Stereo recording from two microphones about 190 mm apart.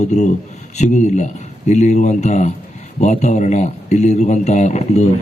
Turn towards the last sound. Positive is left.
turn(degrees=35)  # may be behind; listen again after turning